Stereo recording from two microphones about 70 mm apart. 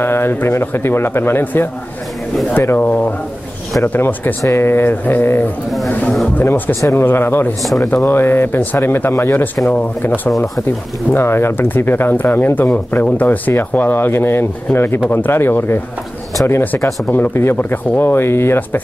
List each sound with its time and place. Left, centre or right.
0.0 s speech: left
4.4 s speech: left
6.7 s speech: left